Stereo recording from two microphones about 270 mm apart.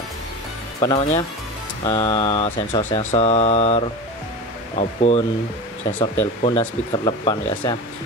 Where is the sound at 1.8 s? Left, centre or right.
Left.